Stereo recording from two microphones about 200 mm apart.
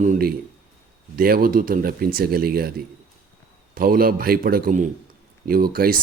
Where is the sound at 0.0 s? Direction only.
45° right (ahead or behind).